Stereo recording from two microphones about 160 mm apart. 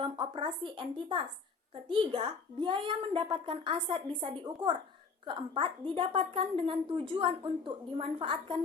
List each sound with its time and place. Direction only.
0.0 s a woman's voice: 30° right (ahead or behind)